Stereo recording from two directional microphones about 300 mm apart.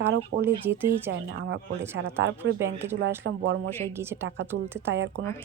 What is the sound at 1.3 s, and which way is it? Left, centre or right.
Speech, right.